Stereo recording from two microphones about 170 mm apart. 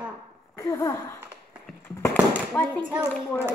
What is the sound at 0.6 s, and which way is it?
Speech, 20° left (ahead or behind).